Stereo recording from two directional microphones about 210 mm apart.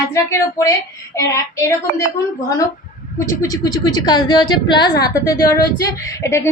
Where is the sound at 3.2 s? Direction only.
15° left (ahead or behind).